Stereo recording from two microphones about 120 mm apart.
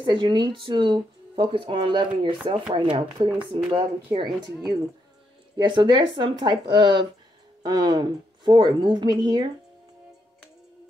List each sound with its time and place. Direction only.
0.0 s a woman's voice: 40° right (ahead or behind)
5.6 s a woman's voice: 40° right (ahead or behind)